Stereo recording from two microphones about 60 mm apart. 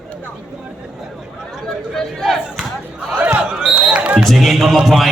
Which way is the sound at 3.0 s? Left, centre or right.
Right.